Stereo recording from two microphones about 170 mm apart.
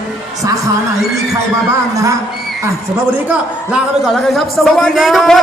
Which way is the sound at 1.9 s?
20° right (ahead or behind).